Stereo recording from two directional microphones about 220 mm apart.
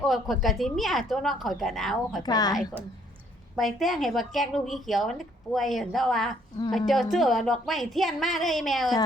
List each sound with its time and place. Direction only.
0.0 s a woman's voice: centre (ahead or behind)
2.2 s a woman's voice: 15° left (ahead or behind)
3.5 s a woman's voice: centre (ahead or behind)